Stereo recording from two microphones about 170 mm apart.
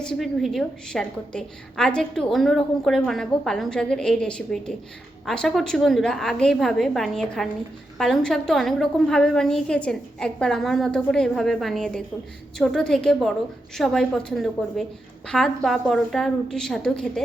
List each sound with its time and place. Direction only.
0.0 s a woman's voice: centre (ahead or behind)